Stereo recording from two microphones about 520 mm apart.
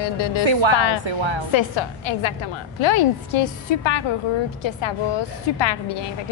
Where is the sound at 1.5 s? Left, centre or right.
Left.